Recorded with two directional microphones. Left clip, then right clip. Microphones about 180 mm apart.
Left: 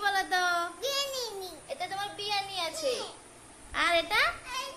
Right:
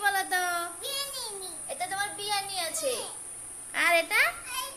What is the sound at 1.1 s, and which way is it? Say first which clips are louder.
Babbling: left 3 dB; 55° left (ahead or behind).